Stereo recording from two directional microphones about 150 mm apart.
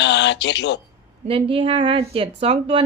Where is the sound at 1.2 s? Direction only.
40° right (ahead or behind).